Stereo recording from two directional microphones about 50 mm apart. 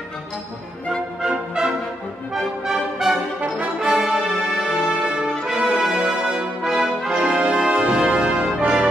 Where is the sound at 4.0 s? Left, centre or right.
Centre.